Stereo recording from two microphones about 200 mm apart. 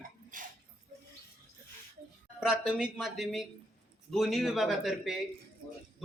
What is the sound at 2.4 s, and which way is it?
A man's voice, centre (ahead or behind).